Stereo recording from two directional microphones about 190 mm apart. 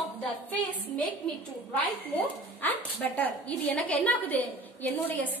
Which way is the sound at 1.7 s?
10° left (ahead or behind).